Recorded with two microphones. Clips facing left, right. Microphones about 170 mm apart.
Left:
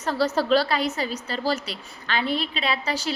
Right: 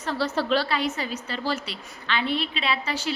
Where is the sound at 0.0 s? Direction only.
40° left (ahead or behind).